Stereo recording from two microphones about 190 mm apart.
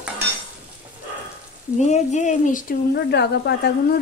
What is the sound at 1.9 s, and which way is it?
Speech, 40° left (ahead or behind).